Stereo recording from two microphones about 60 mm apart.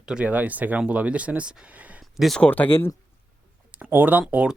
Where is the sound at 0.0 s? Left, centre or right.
Centre.